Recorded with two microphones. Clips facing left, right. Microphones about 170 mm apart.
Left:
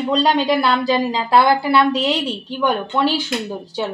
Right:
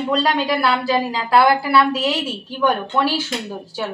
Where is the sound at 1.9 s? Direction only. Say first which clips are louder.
Left 2 dB; 5° right (ahead or behind).